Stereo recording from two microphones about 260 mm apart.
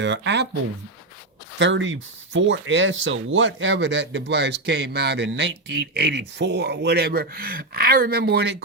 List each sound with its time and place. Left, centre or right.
0.0 s speech: right
1.5 s speech: right